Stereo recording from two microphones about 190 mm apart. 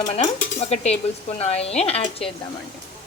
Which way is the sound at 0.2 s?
35° left (ahead or behind).